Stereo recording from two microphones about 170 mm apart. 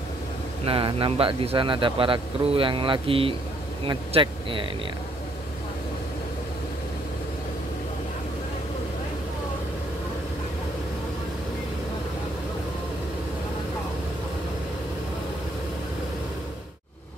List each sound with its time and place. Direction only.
0.7 s a man's voice: 30° right (ahead or behind)